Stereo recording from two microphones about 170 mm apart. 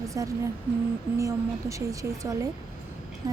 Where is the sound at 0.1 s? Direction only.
20° right (ahead or behind).